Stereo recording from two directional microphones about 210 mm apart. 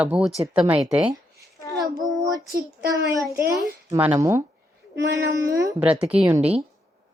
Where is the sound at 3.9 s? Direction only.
10° right (ahead or behind).